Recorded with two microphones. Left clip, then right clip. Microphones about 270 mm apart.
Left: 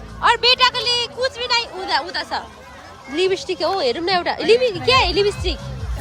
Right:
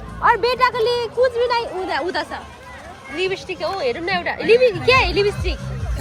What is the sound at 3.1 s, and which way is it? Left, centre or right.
Speech, left.